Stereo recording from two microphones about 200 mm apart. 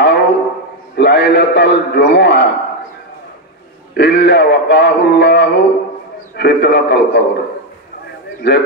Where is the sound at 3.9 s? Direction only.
60° left (ahead or behind).